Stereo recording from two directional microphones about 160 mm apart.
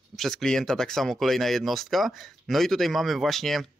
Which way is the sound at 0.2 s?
5° left (ahead or behind).